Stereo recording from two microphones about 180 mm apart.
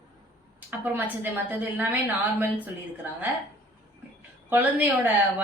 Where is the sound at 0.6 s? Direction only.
10° right (ahead or behind).